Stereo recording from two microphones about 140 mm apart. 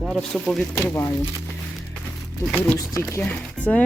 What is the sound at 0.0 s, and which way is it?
Speech, centre (ahead or behind).